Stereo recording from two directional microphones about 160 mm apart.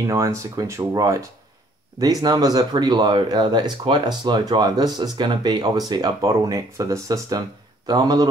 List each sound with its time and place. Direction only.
0.0 s speech: 20° right (ahead or behind)